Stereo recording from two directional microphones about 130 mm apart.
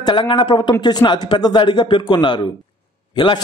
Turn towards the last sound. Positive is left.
turn(degrees=40)  # may be behind; listen again after turning